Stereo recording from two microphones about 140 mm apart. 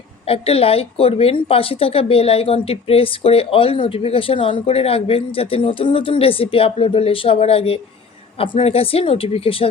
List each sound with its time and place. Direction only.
0.3 s speech: 45° left (ahead or behind)